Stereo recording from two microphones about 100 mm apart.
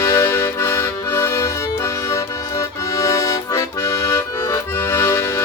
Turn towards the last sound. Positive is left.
turn(degrees=25)  # may be behind; listen again after turning